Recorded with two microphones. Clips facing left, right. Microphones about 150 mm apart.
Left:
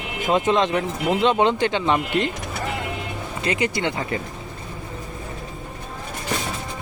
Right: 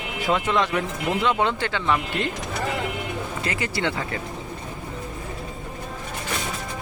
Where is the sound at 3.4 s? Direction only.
20° left (ahead or behind).